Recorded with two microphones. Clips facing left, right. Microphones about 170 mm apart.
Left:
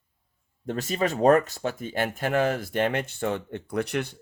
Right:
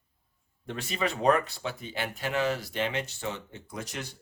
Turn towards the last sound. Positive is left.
turn(degrees=60)  # may be behind; listen again after turning